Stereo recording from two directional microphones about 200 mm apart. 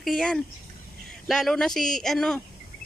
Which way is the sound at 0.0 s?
Centre (ahead or behind).